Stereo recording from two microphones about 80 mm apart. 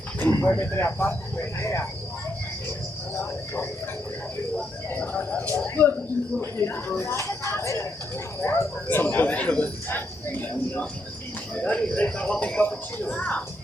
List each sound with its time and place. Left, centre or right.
0.2 s speech: left
3.2 s speech: left
4.9 s speech: left